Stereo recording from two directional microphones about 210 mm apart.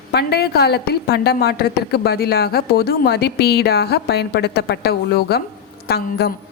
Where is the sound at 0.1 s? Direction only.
50° left (ahead or behind).